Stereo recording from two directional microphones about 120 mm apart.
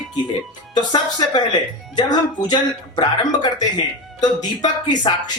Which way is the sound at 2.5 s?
35° left (ahead or behind).